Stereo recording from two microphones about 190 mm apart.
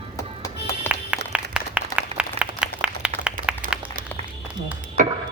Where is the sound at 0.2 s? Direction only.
15° left (ahead or behind).